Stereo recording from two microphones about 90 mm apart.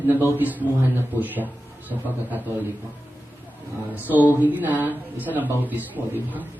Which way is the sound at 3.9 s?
20° right (ahead or behind).